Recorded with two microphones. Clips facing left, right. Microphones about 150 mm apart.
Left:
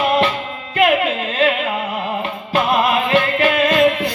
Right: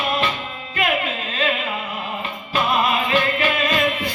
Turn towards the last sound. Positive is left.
turn(degrees=70)  # may be behind; listen again after turning